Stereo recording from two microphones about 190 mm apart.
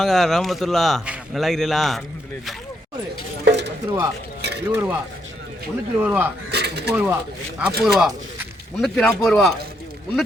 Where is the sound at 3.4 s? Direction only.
65° right (ahead or behind).